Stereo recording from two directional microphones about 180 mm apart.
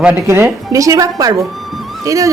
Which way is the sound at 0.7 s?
20° right (ahead or behind).